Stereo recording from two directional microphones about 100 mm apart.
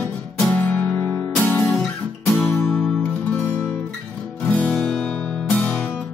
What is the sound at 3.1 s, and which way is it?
Music, 20° left (ahead or behind).